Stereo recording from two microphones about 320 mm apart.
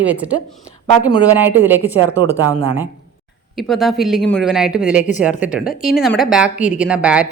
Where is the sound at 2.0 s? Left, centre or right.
Centre.